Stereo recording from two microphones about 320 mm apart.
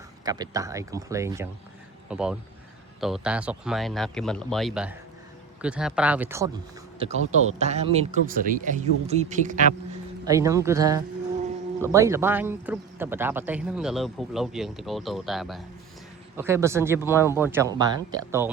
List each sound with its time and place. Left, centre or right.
0.3 s speech: centre
7.0 s speech: centre
10.2 s speech: centre